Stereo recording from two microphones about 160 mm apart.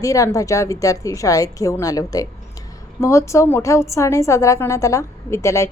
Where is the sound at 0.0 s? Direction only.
20° left (ahead or behind).